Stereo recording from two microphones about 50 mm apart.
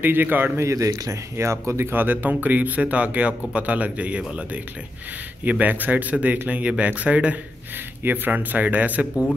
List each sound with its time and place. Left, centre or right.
0.0 s a man's voice: right
0.6 s speech: right
2.0 s speech: right
5.4 s speech: right
8.0 s speech: right